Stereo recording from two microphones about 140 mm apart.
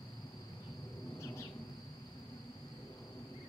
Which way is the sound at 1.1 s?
20° left (ahead or behind).